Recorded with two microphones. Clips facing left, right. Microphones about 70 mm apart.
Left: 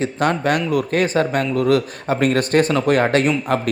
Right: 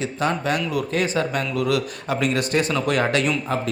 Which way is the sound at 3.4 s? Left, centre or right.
Left.